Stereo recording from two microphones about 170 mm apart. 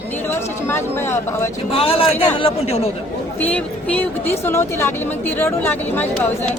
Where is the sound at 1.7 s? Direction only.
35° left (ahead or behind).